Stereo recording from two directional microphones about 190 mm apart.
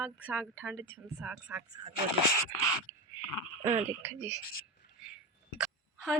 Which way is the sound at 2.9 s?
20° right (ahead or behind).